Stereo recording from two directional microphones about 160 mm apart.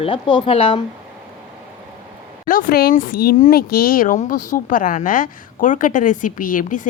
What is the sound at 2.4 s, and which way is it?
A woman's voice, 60° left (ahead or behind).